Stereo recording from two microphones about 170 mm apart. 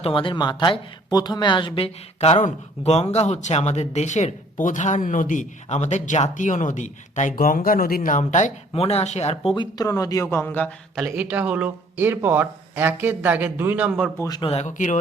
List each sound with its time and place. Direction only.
0.0 s speech: 30° left (ahead or behind)
9.6 s speech: 20° left (ahead or behind)
11.0 s speech: 10° right (ahead or behind)
14.2 s speech: 25° left (ahead or behind)
14.5 s speech: 45° left (ahead or behind)